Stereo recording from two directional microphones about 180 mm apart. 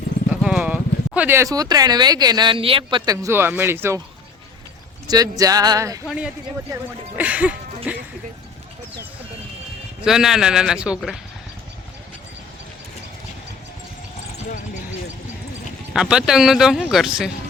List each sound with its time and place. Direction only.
0.4 s speech: 5° right (ahead or behind)
5.0 s speech: 20° right (ahead or behind)
6.1 s speech: 5° right (ahead or behind)
7.2 s a sound: 10° right (ahead or behind)
7.9 s speech: 10° right (ahead or behind)
10.0 s speech: 5° right (ahead or behind)
15.9 s speech: 5° right (ahead or behind)